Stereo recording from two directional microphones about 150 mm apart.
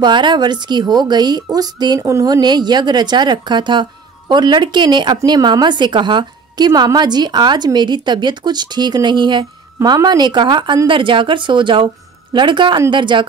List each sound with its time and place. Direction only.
0.0 s a woman's voice: 30° right (ahead or behind)